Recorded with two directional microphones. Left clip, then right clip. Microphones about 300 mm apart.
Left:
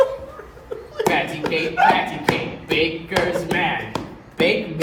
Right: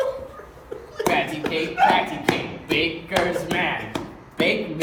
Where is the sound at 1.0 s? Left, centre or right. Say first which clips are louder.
Left 2 dB; centre.